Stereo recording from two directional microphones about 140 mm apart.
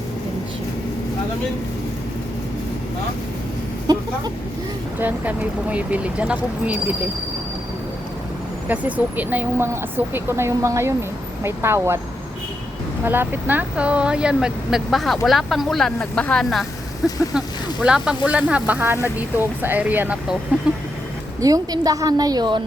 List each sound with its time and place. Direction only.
3.9 s vehicle: 30° right (ahead or behind)
4.9 s speech: 15° right (ahead or behind)
8.7 s speech: 10° right (ahead or behind)
13.1 s speech: 15° right (ahead or behind)
21.4 s a woman's voice: 25° right (ahead or behind)